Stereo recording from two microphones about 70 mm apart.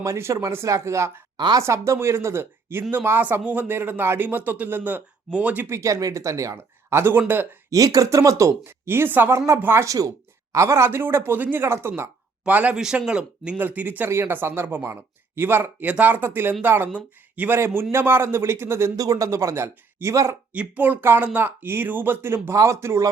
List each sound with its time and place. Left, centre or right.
0.0 s speech: right
5.6 s speech: right
6.9 s speech: right
7.7 s speech: right
8.6 s speech: right
9.8 s speech: right
12.5 s speech: right
12.7 s speech: centre
13.6 s speech: right
17.5 s speech: right
18.9 s speech: right
19.3 s speech: right
20.5 s speech: right